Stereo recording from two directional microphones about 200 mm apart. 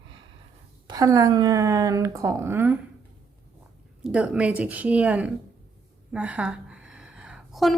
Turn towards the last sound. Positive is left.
turn(degrees=0)  # may be behind; listen again after turning